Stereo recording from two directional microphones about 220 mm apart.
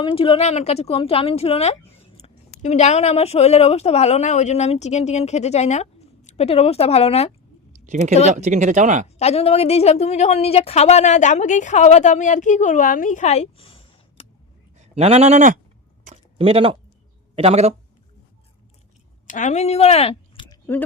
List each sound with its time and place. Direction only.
0.0 s speech: 25° left (ahead or behind)
7.9 s speech: 35° right (ahead or behind)
9.0 s speech: 30° left (ahead or behind)
14.8 s speech: 30° right (ahead or behind)
16.0 s a sound: 25° right (ahead or behind)
17.3 s speech: 30° right (ahead or behind)
19.3 s speech: 35° left (ahead or behind)